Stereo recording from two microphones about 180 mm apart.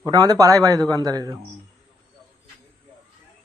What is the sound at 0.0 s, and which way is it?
Speech, 20° right (ahead or behind).